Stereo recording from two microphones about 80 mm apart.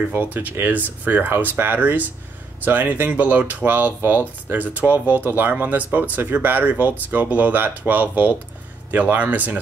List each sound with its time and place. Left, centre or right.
0.1 s speech: right